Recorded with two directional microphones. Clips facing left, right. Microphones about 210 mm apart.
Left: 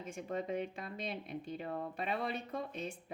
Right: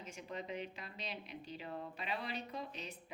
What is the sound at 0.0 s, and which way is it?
Speech, 50° left (ahead or behind).